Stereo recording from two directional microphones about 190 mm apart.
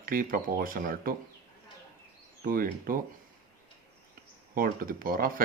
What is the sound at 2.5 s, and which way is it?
Speech, 50° right (ahead or behind).